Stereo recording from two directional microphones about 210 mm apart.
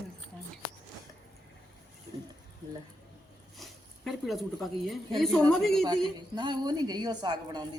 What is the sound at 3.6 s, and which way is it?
Speech, centre (ahead or behind).